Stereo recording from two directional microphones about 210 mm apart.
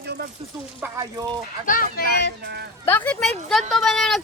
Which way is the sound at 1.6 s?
40° left (ahead or behind).